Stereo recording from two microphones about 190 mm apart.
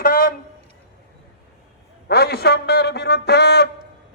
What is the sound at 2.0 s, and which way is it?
Speech, 60° left (ahead or behind).